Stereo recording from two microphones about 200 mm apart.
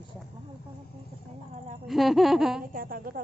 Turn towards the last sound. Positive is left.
turn(degrees=-45)  # may be behind; listen again after turning